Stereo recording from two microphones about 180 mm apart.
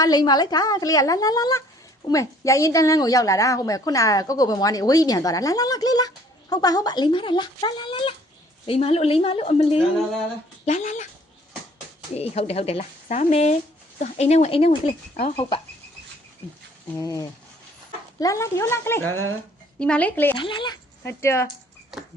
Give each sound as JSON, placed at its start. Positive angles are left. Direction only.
{"t": 0.0, "sound": "a woman's voice", "side_deg": 20}
{"t": 12.1, "sound": "speech", "side_deg": 35}
{"t": 16.9, "sound": "speech", "side_deg": 20}
{"t": 20.3, "sound": "a woman's voice", "side_deg": 25}
{"t": 21.0, "sound": "speech", "side_deg": 15}